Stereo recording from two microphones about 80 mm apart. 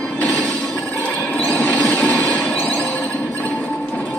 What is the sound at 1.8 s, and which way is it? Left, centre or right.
Train, centre.